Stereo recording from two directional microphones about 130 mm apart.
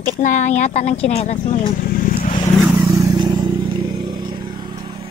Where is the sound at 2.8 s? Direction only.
25° right (ahead or behind).